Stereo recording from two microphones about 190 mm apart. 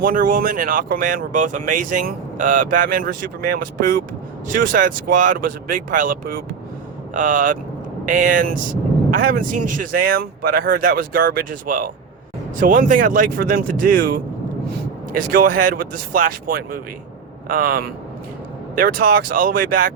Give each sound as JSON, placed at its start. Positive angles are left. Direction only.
{"t": 0.0, "sound": "speech", "side_deg": -45}
{"t": 15.3, "sound": "speech", "side_deg": -45}